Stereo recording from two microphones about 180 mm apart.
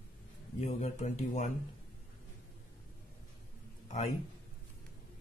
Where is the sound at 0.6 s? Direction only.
40° left (ahead or behind).